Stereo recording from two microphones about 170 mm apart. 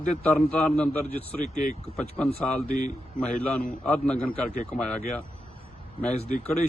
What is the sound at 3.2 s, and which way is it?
A man's voice, 5° left (ahead or behind).